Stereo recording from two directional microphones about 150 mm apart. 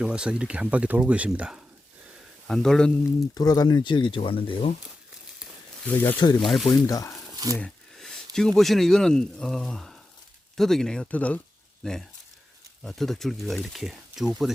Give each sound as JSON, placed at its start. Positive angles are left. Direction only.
{"t": 0.0, "sound": "speech", "side_deg": -5}
{"t": 2.5, "sound": "speech", "side_deg": 5}
{"t": 3.3, "sound": "speech", "side_deg": 25}
{"t": 5.8, "sound": "speech", "side_deg": 10}
{"t": 6.1, "sound": "speech", "side_deg": 30}
{"t": 6.4, "sound": "speech", "side_deg": 0}
{"t": 6.7, "sound": "speech", "side_deg": 25}
{"t": 7.3, "sound": "speech", "side_deg": -25}
{"t": 7.6, "sound": "speech", "side_deg": 5}